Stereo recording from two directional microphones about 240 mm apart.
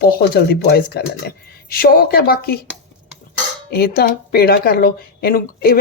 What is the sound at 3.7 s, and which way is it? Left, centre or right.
Speech, left.